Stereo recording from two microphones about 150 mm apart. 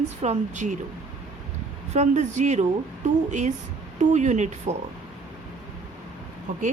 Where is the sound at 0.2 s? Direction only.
50° right (ahead or behind).